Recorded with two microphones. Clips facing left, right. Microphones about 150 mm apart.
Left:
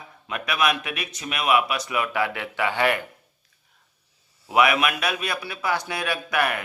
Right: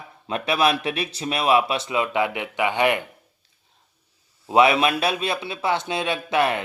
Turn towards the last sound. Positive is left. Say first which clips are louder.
# right 3 dB
turn(degrees=-25)  # may be behind; listen again after turning